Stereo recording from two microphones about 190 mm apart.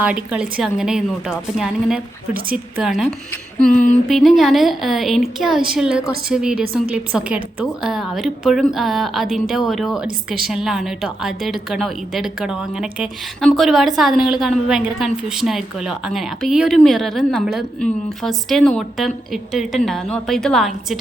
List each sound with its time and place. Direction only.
0.0 s a woman's voice: 5° right (ahead or behind)
3.7 s a sound: 40° left (ahead or behind)
4.1 s a woman's voice: centre (ahead or behind)